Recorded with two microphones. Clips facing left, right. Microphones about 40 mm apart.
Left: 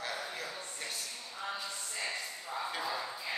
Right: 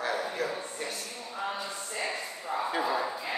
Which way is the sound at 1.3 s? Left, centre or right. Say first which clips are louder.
Right 6 dB; right.